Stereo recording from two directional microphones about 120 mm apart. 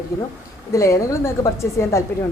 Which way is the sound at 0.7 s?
25° left (ahead or behind).